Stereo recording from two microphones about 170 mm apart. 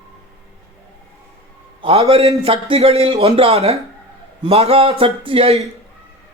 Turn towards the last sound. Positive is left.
turn(degrees=-35)  # may be behind; listen again after turning